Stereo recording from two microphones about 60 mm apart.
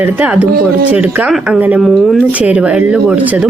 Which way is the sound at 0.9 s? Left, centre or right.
Right.